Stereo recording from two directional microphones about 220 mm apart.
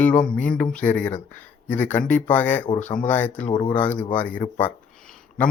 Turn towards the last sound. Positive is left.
turn(degrees=5)  # may be behind; listen again after turning